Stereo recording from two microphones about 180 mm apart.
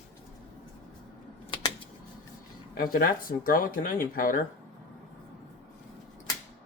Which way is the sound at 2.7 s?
55° left (ahead or behind).